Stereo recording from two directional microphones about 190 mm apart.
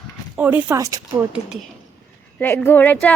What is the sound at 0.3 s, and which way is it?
Speech, 10° right (ahead or behind).